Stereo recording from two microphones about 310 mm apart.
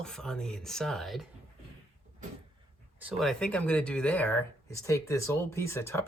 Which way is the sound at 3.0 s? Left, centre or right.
Centre.